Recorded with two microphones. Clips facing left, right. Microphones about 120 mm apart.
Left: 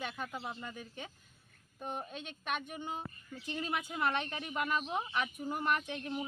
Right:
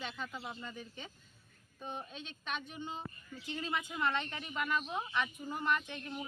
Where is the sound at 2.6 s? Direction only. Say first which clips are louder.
Left 2 dB; 50° left (ahead or behind).